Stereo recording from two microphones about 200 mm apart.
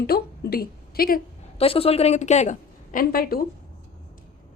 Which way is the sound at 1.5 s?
30° left (ahead or behind).